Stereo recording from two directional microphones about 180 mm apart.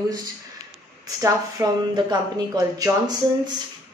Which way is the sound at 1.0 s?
20° right (ahead or behind).